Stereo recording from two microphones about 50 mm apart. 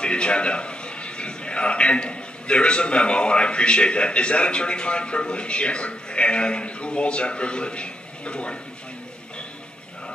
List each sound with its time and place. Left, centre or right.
0.0 s a man's voice: centre